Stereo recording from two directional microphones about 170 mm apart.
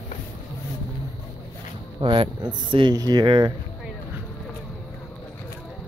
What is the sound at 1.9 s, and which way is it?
Speech, 30° right (ahead or behind).